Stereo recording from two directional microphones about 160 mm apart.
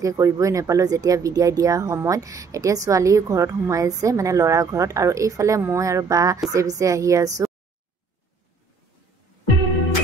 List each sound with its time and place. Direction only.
0.0 s speech: 20° right (ahead or behind)